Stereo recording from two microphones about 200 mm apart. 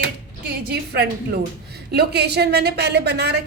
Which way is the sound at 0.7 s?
50° right (ahead or behind).